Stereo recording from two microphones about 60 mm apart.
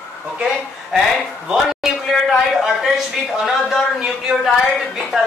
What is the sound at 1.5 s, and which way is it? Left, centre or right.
A man's voice, centre.